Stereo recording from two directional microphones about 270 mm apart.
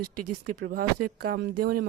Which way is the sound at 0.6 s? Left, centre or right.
Right.